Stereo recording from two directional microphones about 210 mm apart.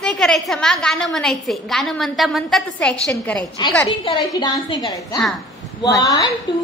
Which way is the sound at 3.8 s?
20° left (ahead or behind).